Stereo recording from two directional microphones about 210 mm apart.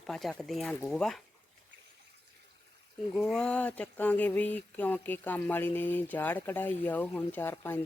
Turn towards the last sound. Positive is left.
turn(degrees=10)  # may be behind; listen again after turning